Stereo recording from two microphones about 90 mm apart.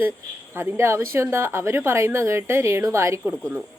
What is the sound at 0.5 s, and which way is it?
A woman's voice, 30° right (ahead or behind).